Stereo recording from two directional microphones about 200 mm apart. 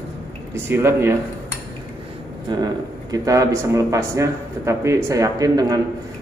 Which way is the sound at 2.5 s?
20° right (ahead or behind).